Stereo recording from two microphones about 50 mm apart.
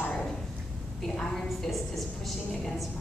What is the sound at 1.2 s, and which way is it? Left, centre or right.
Speech, centre.